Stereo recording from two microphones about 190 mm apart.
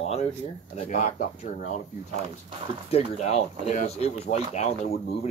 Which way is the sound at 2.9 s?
35° left (ahead or behind).